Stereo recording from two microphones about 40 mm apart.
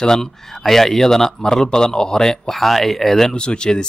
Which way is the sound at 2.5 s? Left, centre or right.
Centre.